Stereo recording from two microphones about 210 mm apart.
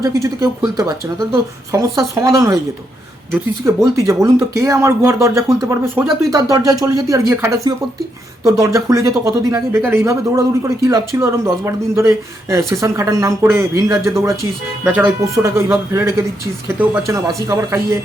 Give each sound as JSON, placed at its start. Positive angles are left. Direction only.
{"t": 0.0, "sound": "speech", "side_deg": -15}